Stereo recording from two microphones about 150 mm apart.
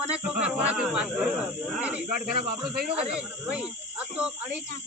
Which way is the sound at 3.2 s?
10° right (ahead or behind).